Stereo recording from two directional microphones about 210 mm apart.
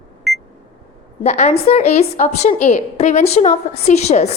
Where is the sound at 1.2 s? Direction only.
30° left (ahead or behind).